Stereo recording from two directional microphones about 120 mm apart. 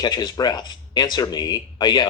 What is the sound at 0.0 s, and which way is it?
Speech, 35° left (ahead or behind).